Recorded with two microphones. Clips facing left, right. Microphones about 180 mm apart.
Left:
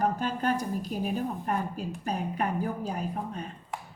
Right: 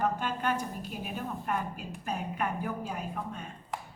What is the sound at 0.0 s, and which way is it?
A woman's voice, 40° left (ahead or behind).